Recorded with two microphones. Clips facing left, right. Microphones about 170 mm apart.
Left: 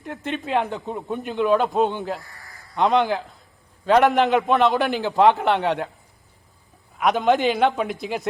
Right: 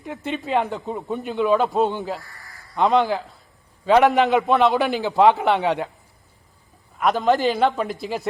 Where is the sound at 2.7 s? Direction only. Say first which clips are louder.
Right 1 dB; centre (ahead or behind).